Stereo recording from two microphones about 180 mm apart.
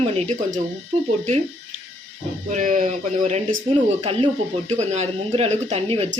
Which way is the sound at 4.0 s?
30° right (ahead or behind).